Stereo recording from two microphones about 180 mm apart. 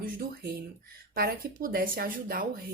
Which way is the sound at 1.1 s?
55° right (ahead or behind).